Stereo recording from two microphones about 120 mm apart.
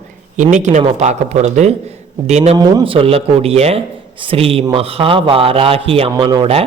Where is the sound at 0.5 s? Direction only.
85° right; by 2.6 s 65° right (ahead or behind).